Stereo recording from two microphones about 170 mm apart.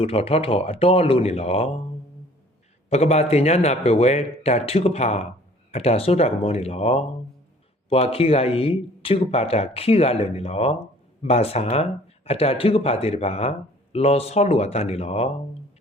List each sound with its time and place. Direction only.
0.0 s speech: 35° left (ahead or behind)
2.9 s speech: 40° left (ahead or behind)